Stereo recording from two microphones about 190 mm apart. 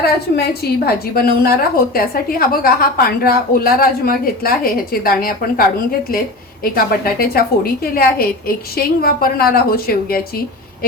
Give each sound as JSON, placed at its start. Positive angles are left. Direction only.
{"t": 0.0, "sound": "a woman's voice", "side_deg": 55}
{"t": 6.7, "sound": "a woman's voice", "side_deg": 50}